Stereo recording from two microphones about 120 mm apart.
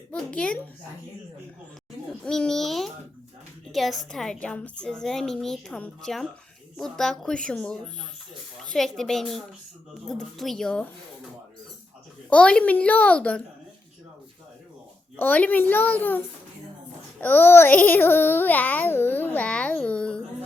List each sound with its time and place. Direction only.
0.1 s a child's voice: 10° left (ahead or behind)
2.2 s a woman's voice: 5° left (ahead or behind)
12.3 s a child's voice: 10° left (ahead or behind)
15.1 s a child's voice: 15° left (ahead or behind)